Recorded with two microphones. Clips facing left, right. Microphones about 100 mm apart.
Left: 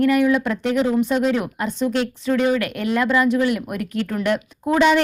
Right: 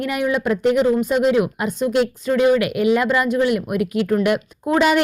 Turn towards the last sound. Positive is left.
turn(degrees=-5)  # may be behind; listen again after turning